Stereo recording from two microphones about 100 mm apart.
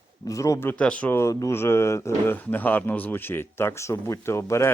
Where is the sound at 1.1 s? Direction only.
30° left (ahead or behind).